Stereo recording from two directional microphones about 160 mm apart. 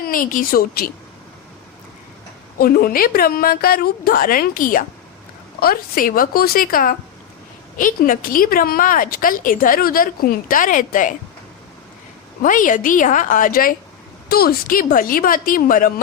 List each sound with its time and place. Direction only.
0.0 s a woman's voice: 60° left (ahead or behind)
2.6 s a woman's voice: 65° left (ahead or behind)
12.4 s a woman's voice: 55° left (ahead or behind)